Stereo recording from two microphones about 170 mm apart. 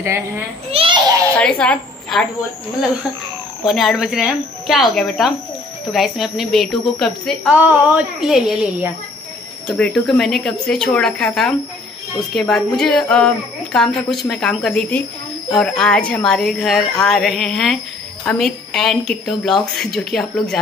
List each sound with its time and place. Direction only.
0.7 s a child's voice: 35° right (ahead or behind)
1.3 s a woman's voice: 5° left (ahead or behind)
3.6 s a woman's voice: centre (ahead or behind)